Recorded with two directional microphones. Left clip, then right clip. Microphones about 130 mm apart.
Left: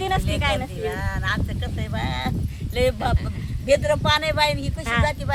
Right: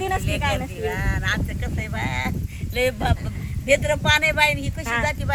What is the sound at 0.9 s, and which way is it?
Speech, 40° left (ahead or behind).